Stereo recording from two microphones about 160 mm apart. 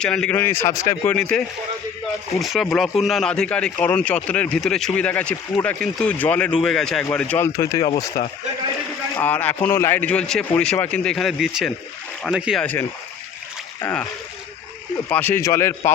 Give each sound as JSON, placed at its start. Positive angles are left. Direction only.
{"t": 0.0, "sound": "a man's voice", "side_deg": 5}
{"t": 9.1, "sound": "a man's voice", "side_deg": 10}
{"t": 13.8, "sound": "a man's voice", "side_deg": 10}
{"t": 15.1, "sound": "a man's voice", "side_deg": 10}